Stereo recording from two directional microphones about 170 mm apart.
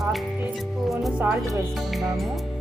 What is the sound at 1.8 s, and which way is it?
Music, centre (ahead or behind).